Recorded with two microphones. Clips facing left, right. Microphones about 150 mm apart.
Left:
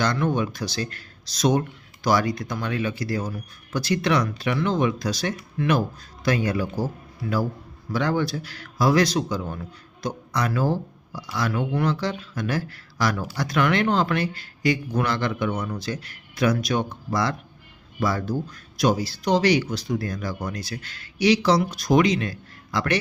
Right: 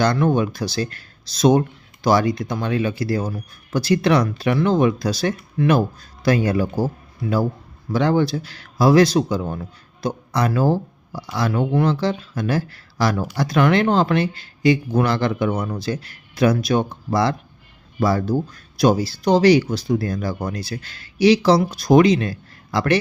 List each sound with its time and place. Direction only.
0.0 s speech: 35° right (ahead or behind)